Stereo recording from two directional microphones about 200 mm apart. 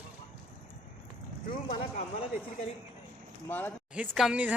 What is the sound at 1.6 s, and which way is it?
Speech, 30° left (ahead or behind).